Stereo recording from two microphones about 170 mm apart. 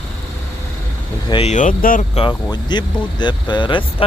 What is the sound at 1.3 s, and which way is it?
Speech, 35° left (ahead or behind).